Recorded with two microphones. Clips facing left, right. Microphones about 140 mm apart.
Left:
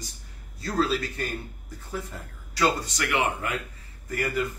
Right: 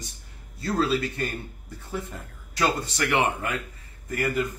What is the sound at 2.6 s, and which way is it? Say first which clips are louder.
Speech: even; 30° right (ahead or behind).